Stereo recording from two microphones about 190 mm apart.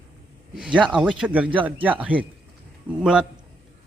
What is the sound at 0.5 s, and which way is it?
A man's voice, 5° right (ahead or behind).